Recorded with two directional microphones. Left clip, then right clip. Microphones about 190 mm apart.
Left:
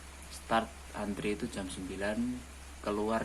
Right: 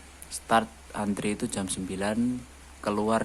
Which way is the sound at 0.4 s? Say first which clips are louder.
Right 7 dB; 40° right (ahead or behind).